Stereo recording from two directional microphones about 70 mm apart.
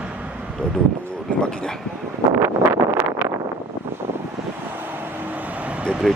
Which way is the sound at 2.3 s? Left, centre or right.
Right.